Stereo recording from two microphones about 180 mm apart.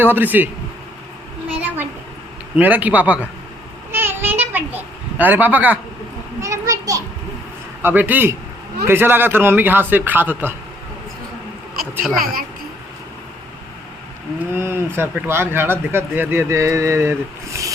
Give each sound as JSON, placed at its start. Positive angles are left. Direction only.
{"t": 0.0, "sound": "speech", "side_deg": -10}
{"t": 1.6, "sound": "a sound", "side_deg": -10}
{"t": 2.6, "sound": "speech", "side_deg": -10}
{"t": 3.9, "sound": "a sound", "side_deg": -10}
{"t": 7.8, "sound": "speech", "side_deg": -10}
{"t": 12.1, "sound": "speech", "side_deg": -55}
{"t": 14.3, "sound": "speech", "side_deg": -15}